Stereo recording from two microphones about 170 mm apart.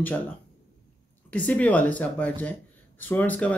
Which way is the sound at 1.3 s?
10° left (ahead or behind).